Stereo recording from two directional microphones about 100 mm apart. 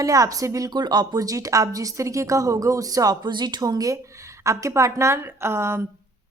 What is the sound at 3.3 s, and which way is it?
A woman's voice, 45° right (ahead or behind).